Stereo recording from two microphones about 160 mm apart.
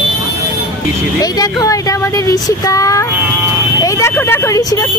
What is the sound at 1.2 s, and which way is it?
Speech, 25° left (ahead or behind).